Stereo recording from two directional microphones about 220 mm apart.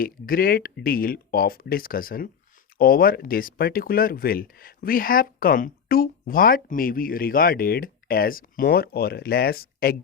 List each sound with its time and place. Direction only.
0.0 s speech: 40° left (ahead or behind)